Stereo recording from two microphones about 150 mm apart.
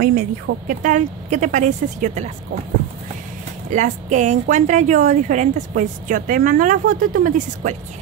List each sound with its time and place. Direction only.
0.0 s a woman's voice: 75° right (ahead or behind); by 2.3 s 50° right (ahead or behind)
3.7 s a woman's voice: 55° right (ahead or behind)